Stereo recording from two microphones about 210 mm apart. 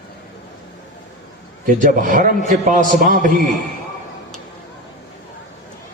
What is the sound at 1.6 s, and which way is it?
A man's voice, 40° right (ahead or behind).